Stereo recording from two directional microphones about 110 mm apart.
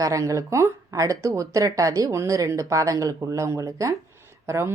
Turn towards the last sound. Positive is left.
turn(degrees=-25)  # may be behind; listen again after turning